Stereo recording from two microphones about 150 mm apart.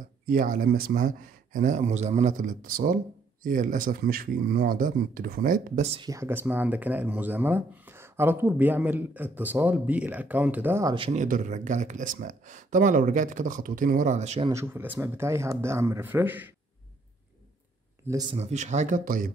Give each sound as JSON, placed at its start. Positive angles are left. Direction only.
{"t": 0.3, "sound": "speech", "side_deg": -70}
{"t": 5.9, "sound": "speech", "side_deg": -20}
{"t": 11.0, "sound": "speech", "side_deg": -45}
{"t": 11.2, "sound": "speech", "side_deg": -60}
{"t": 14.5, "sound": "speech", "side_deg": -15}
{"t": 18.3, "sound": "speech", "side_deg": -50}